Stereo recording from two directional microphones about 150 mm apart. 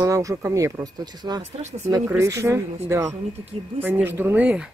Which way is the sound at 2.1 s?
20° right (ahead or behind).